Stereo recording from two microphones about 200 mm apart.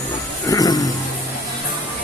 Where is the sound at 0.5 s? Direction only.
20° left (ahead or behind).